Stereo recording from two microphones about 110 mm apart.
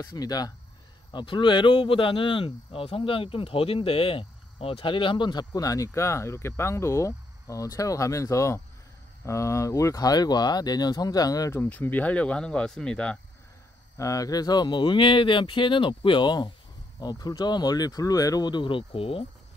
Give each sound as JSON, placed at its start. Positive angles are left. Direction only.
{"t": 0.0, "sound": "speech", "side_deg": 35}
{"t": 11.5, "sound": "speech", "side_deg": 20}
{"t": 13.9, "sound": "speech", "side_deg": 30}